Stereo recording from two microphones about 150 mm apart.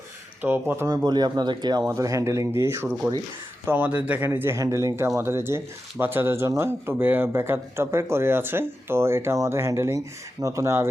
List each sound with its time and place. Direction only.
0.4 s speech: 15° right (ahead or behind)
0.9 s speech: 25° right (ahead or behind)